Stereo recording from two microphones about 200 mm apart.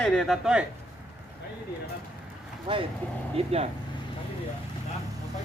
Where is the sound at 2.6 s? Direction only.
25° right (ahead or behind).